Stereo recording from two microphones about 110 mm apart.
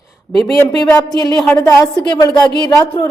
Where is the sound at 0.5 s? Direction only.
25° left (ahead or behind).